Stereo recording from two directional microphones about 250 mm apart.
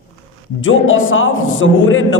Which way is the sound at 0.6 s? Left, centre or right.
Left.